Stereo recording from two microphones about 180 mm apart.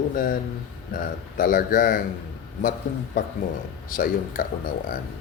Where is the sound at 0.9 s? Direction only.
50° left (ahead or behind).